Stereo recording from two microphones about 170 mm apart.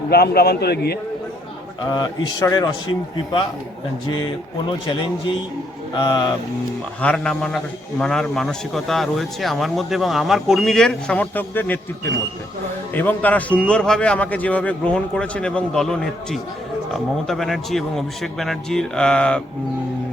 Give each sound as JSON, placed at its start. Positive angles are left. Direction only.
{"t": 0.1, "sound": "a man's voice", "side_deg": 70}
{"t": 1.9, "sound": "a man's voice", "side_deg": 25}
{"t": 5.9, "sound": "a man's voice", "side_deg": 25}
{"t": 7.0, "sound": "a man's voice", "side_deg": 5}